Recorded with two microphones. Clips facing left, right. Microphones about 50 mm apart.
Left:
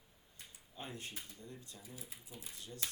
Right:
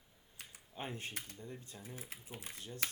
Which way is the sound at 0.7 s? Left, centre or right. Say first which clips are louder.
Right 4 dB; right.